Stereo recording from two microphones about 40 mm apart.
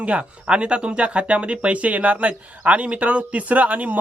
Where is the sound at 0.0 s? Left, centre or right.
Right.